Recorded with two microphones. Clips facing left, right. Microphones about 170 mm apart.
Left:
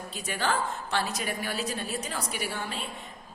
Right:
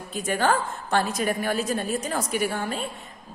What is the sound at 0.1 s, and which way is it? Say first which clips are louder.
A woman's voice: right 7 dB; 50° right (ahead or behind).